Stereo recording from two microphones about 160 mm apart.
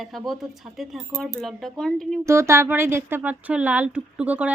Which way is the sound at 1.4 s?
Centre (ahead or behind).